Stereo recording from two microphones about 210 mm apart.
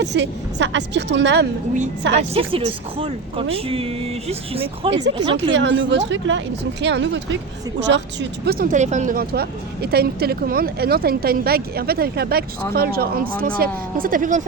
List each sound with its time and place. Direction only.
0.0 s a woman's voice: 55° right (ahead or behind)
2.1 s speech: 25° right (ahead or behind)
5.4 s a woman's voice: 60° right (ahead or behind); by 14.4 s 40° right (ahead or behind)